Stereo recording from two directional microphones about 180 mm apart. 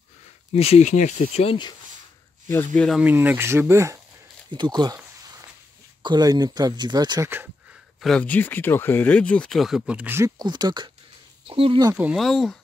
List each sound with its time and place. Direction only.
0.5 s speech: 35° left (ahead or behind)
2.4 s speech: 15° left (ahead or behind)
2.7 s speech: centre (ahead or behind)
3.1 s speech: 10° right (ahead or behind)
6.0 s speech: 20° right (ahead or behind)
8.0 s speech: 5° left (ahead or behind); by 11.9 s 30° right (ahead or behind)
11.9 s speech: 10° right (ahead or behind)